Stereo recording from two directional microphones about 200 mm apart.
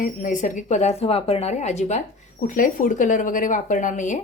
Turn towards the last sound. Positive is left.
turn(degrees=40)  # may be behind; listen again after turning